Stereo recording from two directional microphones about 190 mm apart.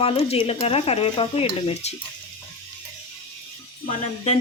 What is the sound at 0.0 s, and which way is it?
Speech, 30° left (ahead or behind).